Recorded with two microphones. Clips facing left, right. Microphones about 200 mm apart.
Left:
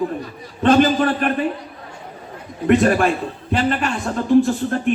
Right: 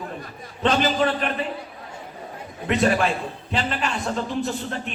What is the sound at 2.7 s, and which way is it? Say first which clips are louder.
A man's voice: left 6 dB; 50° left (ahead or behind).